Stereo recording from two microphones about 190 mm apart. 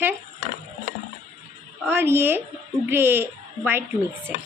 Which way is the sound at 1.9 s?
10° right (ahead or behind).